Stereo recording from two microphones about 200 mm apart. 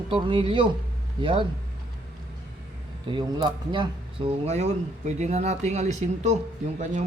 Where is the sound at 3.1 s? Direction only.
20° right (ahead or behind).